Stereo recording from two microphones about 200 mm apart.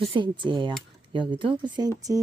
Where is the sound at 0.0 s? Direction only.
25° right (ahead or behind).